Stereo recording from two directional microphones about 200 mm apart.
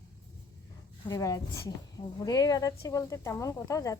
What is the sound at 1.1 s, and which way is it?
Speech, 15° left (ahead or behind).